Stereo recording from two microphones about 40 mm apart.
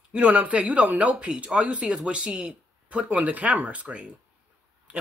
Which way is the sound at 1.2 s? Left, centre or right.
Right.